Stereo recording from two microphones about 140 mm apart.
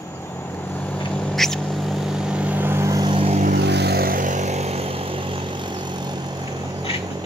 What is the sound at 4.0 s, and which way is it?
Vehicle, 80° right.